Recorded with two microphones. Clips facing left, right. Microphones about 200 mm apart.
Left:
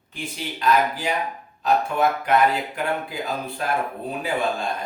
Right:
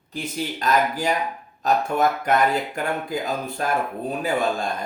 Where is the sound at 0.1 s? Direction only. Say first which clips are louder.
Right 4 dB; 40° right (ahead or behind).